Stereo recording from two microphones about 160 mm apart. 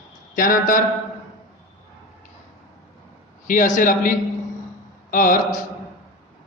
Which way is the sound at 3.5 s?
55° left (ahead or behind).